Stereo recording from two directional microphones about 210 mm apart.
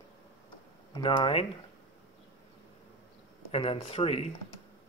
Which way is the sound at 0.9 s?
20° left (ahead or behind).